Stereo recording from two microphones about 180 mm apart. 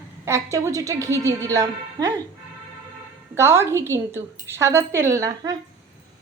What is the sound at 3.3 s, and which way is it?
A woman's voice, 15° right (ahead or behind).